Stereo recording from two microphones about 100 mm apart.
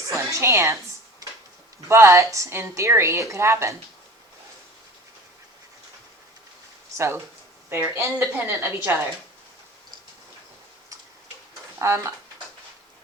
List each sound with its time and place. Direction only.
0.1 s a woman's voice: 30° right (ahead or behind)
1.9 s a woman's voice: 30° right (ahead or behind)
6.9 s a woman's voice: 25° right (ahead or behind)
11.8 s a woman's voice: 30° right (ahead or behind)